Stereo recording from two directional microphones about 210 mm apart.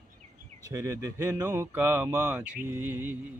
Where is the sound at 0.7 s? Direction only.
15° right (ahead or behind).